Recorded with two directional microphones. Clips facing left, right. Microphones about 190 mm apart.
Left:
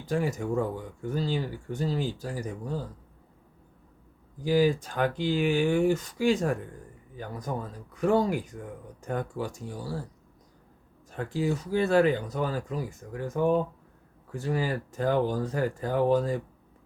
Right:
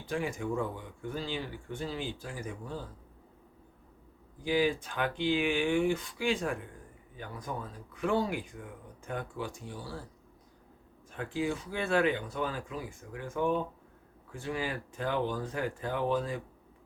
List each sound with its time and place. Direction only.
0.0 s speech: 40° left (ahead or behind)
4.4 s speech: 40° left (ahead or behind)
11.1 s speech: 40° left (ahead or behind)